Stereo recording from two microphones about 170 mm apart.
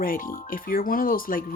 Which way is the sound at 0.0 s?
55° left (ahead or behind).